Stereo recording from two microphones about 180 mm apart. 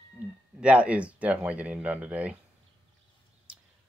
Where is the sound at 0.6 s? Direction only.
5° right (ahead or behind).